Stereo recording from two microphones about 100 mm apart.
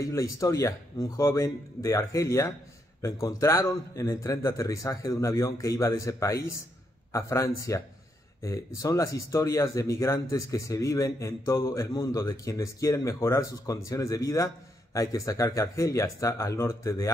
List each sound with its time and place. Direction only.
0.0 s speech: 30° left (ahead or behind)